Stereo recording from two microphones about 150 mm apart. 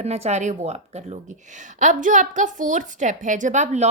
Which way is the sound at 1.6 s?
55° right (ahead or behind).